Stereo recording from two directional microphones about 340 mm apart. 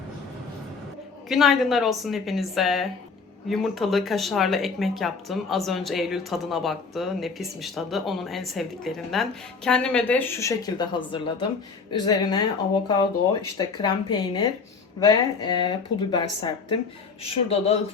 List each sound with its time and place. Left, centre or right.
1.3 s a woman's voice: centre
13.6 s a woman's voice: centre